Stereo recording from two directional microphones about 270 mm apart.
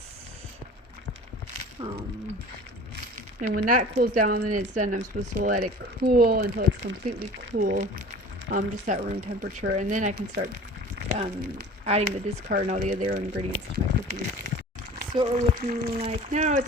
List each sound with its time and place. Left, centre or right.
1.8 s a sound: centre
2.9 s speech: right
15.1 s speech: right